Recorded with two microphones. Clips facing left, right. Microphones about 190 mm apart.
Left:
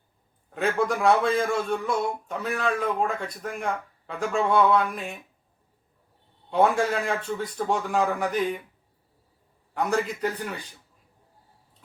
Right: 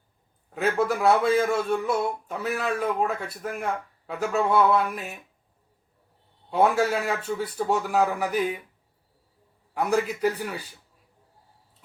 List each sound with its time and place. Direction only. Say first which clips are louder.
0.5 s speech: right 1 dB; 5° right (ahead or behind)
6.5 s a man's voice: even; 5° right (ahead or behind)
9.7 s a man's voice: right 1 dB; 10° right (ahead or behind)